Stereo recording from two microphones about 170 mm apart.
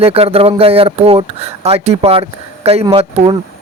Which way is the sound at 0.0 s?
35° right (ahead or behind).